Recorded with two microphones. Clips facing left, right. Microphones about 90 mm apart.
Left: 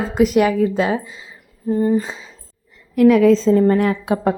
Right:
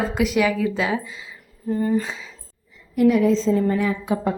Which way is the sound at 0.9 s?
30° left (ahead or behind).